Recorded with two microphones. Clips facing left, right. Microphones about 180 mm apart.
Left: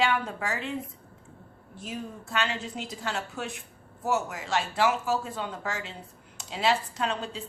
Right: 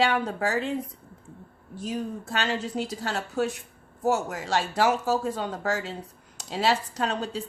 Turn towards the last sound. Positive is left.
turn(degrees=-40)  # may be behind; listen again after turning